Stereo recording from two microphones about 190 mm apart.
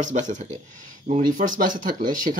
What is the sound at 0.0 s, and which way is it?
Speech, 40° right (ahead or behind).